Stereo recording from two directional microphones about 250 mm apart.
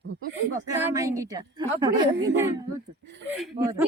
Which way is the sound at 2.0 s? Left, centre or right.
Right.